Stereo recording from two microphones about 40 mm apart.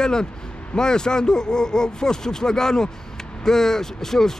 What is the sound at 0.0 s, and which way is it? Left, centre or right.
Speech, centre.